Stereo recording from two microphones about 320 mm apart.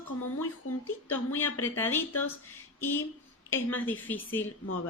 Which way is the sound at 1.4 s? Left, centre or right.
Centre.